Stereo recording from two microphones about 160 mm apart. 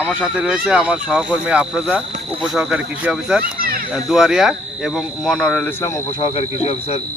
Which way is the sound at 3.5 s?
65° right (ahead or behind).